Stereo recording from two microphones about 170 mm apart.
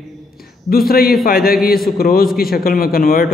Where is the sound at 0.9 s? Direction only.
60° left (ahead or behind).